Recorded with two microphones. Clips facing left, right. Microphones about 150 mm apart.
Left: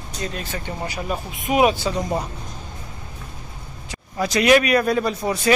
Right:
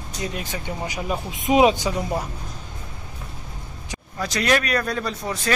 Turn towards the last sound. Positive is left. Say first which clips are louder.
# left 5 dB
turn(degrees=10)  # may be behind; listen again after turning